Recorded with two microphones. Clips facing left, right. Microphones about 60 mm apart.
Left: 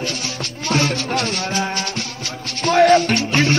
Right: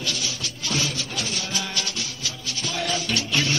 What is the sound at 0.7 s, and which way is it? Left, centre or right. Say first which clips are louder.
Music: left 9 dB; left.